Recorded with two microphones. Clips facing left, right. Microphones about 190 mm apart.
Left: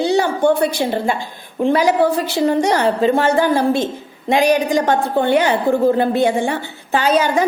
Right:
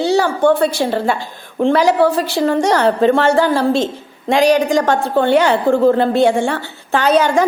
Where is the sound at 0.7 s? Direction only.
15° left (ahead or behind).